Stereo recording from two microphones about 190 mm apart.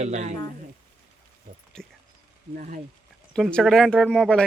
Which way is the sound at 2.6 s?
45° right (ahead or behind).